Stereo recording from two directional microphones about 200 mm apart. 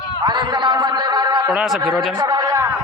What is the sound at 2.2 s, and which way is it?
Speech, 20° right (ahead or behind).